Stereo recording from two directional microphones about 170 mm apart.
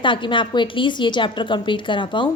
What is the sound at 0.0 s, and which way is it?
A woman's voice, 30° left (ahead or behind).